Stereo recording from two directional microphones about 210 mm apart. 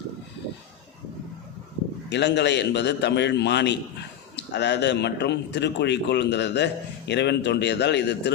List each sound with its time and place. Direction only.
2.0 s a man's voice: 55° left (ahead or behind)